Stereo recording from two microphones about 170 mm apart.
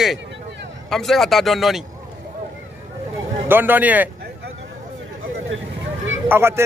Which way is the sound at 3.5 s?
10° right (ahead or behind).